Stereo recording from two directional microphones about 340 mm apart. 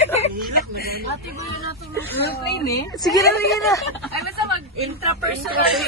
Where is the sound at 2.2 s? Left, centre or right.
Left.